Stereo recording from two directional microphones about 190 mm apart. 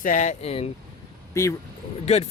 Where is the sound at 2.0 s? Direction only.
35° left (ahead or behind).